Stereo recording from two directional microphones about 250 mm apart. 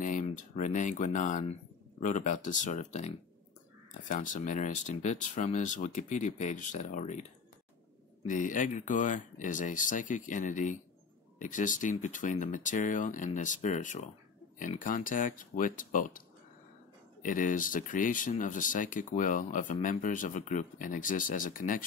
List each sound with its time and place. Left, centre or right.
0.0 s speech: left
8.3 s speech: left
17.2 s speech: left